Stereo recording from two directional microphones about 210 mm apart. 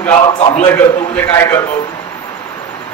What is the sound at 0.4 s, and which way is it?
Speech, 30° left (ahead or behind).